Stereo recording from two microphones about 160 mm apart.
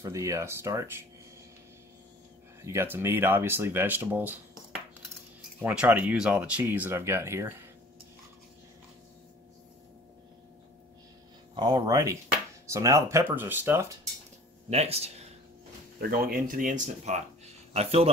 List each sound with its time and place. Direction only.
0.0 s speech: 20° right (ahead or behind)
2.6 s speech: 15° right (ahead or behind)
5.6 s speech: 10° right (ahead or behind)
11.5 s speech: 25° right (ahead or behind)
14.7 s speech: 40° right (ahead or behind)
16.0 s speech: 65° right (ahead or behind); by 18.1 s 40° right (ahead or behind)